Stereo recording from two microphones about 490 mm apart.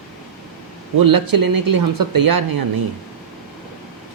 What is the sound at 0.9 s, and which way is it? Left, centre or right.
Speech, right.